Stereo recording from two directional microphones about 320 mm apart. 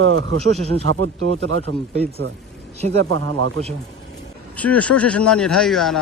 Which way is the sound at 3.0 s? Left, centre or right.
Right.